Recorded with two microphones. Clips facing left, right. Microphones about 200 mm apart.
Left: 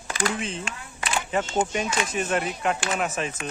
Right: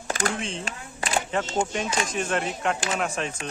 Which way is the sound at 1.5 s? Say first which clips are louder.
Left 1 dB; 5° left (ahead or behind).